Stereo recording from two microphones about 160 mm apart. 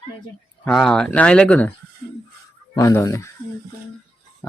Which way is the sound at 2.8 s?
20° left (ahead or behind).